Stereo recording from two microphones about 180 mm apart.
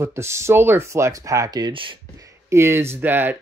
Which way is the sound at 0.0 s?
15° right (ahead or behind).